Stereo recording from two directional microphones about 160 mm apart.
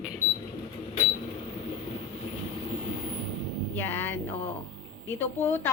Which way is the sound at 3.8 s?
15° left (ahead or behind).